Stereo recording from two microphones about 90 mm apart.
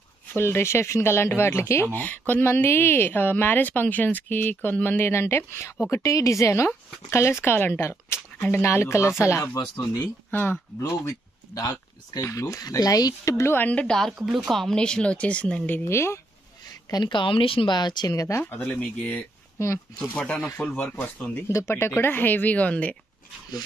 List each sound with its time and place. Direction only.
0.3 s speech: 25° left (ahead or behind)
10.8 s speech: 40° left (ahead or behind)
13.7 s speech: 10° left (ahead or behind)
14.1 s speech: 10° right (ahead or behind)
14.5 s speech: 5° left (ahead or behind)
15.8 s speech: 30° left (ahead or behind)
16.9 s speech: 60° left (ahead or behind); by 18.4 s 35° left (ahead or behind)
18.4 s speech: 20° left (ahead or behind)
21.5 s speech: 30° left (ahead or behind); by 22.9 s 15° left (ahead or behind)